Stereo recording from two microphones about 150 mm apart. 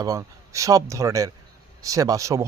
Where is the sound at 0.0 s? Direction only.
20° right (ahead or behind).